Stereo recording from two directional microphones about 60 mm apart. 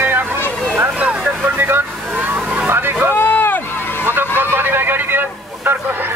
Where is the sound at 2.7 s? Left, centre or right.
Right.